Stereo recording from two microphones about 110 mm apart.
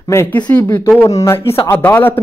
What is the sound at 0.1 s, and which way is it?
Speech, 25° left (ahead or behind).